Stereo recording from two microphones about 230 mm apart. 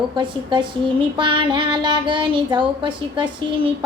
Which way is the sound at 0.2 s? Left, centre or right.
Right.